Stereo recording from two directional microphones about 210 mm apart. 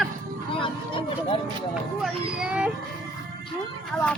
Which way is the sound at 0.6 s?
25° left (ahead or behind).